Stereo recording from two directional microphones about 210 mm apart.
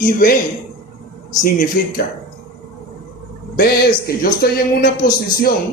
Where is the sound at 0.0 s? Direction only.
45° left (ahead or behind).